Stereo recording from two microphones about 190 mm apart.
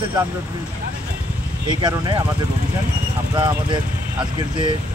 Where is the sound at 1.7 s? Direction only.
25° right (ahead or behind).